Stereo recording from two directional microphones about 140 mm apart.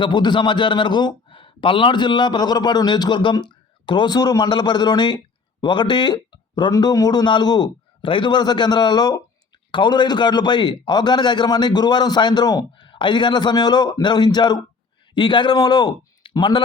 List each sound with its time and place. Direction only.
0.0 s a man's voice: 35° left (ahead or behind)